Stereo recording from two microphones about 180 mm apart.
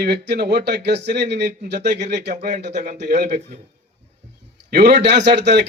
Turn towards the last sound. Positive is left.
turn(degrees=-75)  # may be behind; listen again after turning